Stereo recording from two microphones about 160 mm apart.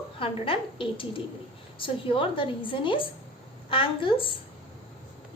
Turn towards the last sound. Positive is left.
turn(degrees=35)  # may be behind; listen again after turning